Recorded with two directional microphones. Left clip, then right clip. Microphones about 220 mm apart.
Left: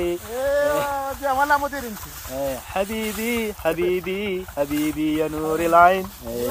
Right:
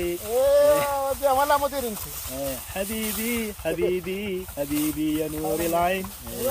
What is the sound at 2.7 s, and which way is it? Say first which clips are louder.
Speech: left 5 dB; centre (ahead or behind).